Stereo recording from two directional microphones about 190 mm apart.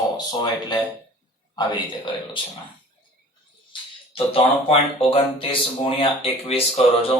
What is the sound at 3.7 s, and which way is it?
Speech, 30° left (ahead or behind).